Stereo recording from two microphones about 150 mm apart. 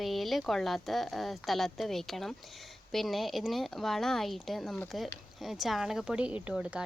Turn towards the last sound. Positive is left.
turn(degrees=-5)  # may be behind; listen again after turning